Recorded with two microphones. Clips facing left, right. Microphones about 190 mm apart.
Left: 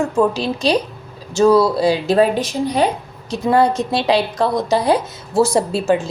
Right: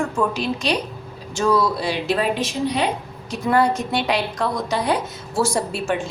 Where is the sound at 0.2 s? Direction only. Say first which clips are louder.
Left 5 dB; 35° left (ahead or behind).